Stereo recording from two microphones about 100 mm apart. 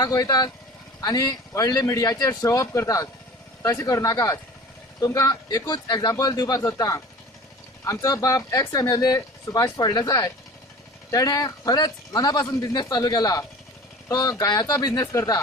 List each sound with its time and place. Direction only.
0.0 s speech: 40° left (ahead or behind)
15.0 s speech: 25° left (ahead or behind)